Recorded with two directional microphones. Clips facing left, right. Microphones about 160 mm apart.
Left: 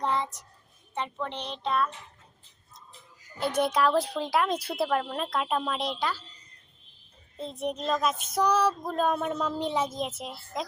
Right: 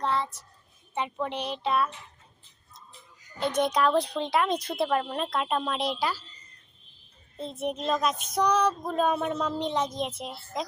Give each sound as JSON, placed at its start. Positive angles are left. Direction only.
{"t": 0.0, "sound": "child singing", "side_deg": 15}
{"t": 0.9, "sound": "speech", "side_deg": -10}
{"t": 3.4, "sound": "child singing", "side_deg": 5}
{"t": 7.3, "sound": "child singing", "side_deg": 0}